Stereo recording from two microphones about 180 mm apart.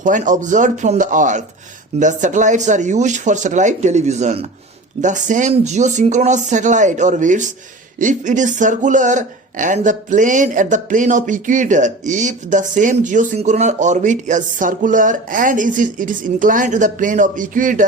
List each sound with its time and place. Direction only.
0.0 s speech: 45° right (ahead or behind)